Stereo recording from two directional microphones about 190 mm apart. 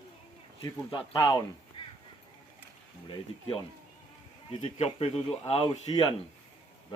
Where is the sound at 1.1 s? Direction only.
20° left (ahead or behind).